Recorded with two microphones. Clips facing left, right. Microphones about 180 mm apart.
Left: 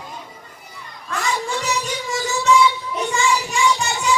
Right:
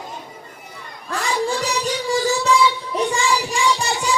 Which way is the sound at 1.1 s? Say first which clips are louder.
Right 2 dB; 35° right (ahead or behind).